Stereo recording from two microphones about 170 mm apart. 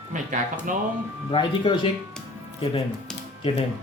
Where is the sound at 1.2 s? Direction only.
30° left (ahead or behind).